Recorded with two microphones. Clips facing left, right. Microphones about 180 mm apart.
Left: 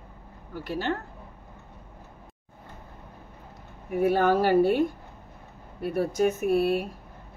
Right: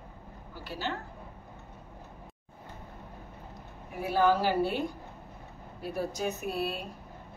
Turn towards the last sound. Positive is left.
turn(degrees=55)  # may be behind; listen again after turning